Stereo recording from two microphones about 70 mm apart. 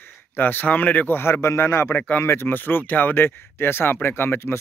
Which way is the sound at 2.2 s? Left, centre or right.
Left.